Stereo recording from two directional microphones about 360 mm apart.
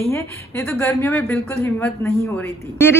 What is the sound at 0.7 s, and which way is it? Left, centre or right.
Speech, centre.